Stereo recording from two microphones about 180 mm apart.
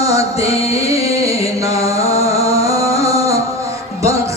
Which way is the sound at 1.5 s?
15° right (ahead or behind).